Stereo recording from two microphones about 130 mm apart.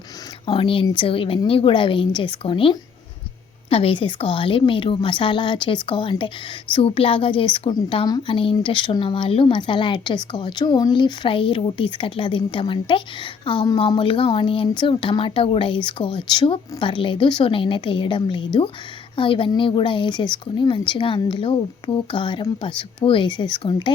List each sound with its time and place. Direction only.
0.4 s speech: 45° left (ahead or behind)